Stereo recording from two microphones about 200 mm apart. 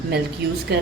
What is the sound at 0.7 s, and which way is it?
Speech, 55° right (ahead or behind).